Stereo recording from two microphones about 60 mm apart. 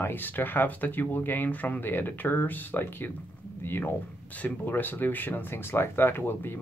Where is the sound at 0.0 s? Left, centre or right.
Left.